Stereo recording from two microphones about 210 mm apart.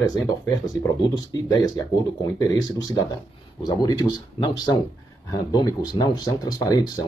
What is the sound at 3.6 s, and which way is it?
Speech, 20° left (ahead or behind).